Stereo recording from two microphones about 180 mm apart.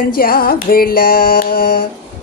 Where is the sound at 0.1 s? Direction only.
55° left (ahead or behind).